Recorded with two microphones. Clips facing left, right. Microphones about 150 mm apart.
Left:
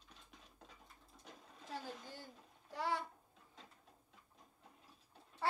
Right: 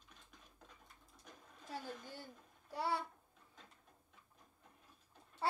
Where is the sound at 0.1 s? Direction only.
30° left (ahead or behind).